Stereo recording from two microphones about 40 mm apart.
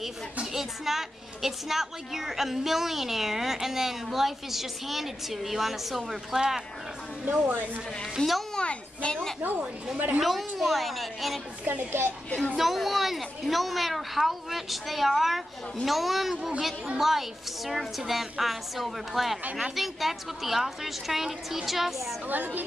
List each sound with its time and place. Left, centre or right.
0.5 s a woman's voice: centre
7.2 s a woman's voice: right
8.2 s a child's voice: left
9.4 s a woman's voice: right
10.2 s speech: centre
12.5 s speech: centre
22.3 s a woman's voice: right